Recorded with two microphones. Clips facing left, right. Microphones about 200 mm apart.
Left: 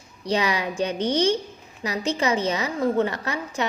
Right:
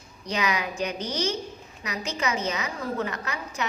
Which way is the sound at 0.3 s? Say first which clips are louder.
Left 4 dB; 30° left (ahead or behind).